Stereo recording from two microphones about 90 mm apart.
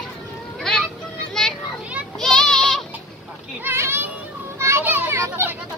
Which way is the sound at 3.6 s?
25° right (ahead or behind).